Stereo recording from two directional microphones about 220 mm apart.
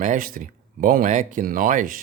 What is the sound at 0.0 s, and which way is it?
Speech, 35° right (ahead or behind).